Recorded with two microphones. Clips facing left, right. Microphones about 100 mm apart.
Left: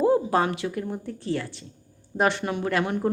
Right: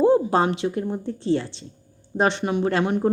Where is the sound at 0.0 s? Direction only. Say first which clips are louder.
Right 3 dB; 25° right (ahead or behind).